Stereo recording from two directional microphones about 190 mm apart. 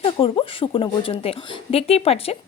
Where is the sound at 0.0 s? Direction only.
30° left (ahead or behind).